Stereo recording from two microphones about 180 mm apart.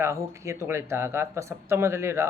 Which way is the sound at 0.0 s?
15° right (ahead or behind).